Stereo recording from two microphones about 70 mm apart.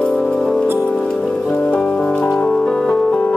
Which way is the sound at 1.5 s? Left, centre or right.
Left.